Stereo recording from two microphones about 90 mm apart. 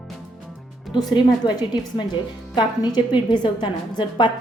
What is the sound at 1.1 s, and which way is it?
A woman's voice, 50° left (ahead or behind).